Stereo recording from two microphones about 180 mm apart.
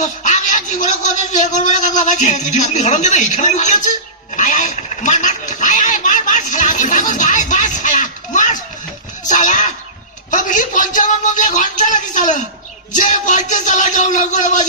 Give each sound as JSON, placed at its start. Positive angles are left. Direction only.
{"t": 0.0, "sound": "a man's voice", "side_deg": 40}
{"t": 4.4, "sound": "a sound", "side_deg": 45}
{"t": 12.9, "sound": "speech", "side_deg": 45}